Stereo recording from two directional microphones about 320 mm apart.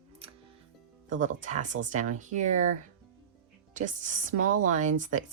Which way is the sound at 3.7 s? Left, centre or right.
Right.